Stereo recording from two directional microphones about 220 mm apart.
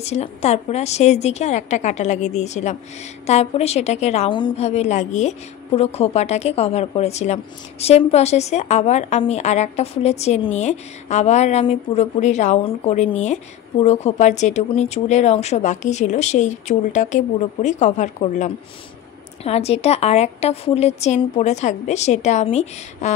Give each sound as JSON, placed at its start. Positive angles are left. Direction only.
{"t": 0.0, "sound": "a woman's voice", "side_deg": 30}